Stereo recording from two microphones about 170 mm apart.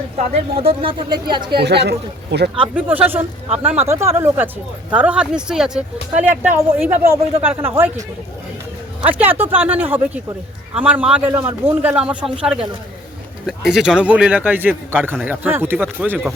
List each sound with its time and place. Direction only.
0.6 s speech: 30° right (ahead or behind)
1.5 s speech: 75° right (ahead or behind)
2.7 s speech: 10° right (ahead or behind)
9.0 s speech: 10° right (ahead or behind)
13.6 s speech: 5° right (ahead or behind)